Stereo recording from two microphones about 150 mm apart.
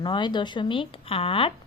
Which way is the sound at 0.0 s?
30° left (ahead or behind).